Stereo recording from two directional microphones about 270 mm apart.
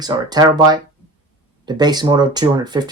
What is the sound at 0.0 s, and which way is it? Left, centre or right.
Speech, centre.